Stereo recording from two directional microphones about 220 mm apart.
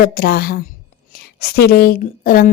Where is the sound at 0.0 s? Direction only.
45° left (ahead or behind).